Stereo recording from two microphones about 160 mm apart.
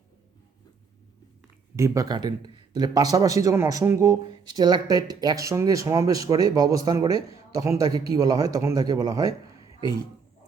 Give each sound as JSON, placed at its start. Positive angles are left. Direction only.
{"t": 1.7, "sound": "speech", "side_deg": -20}